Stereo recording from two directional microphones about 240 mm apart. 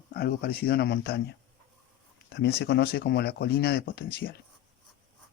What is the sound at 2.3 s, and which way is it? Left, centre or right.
Speech, left.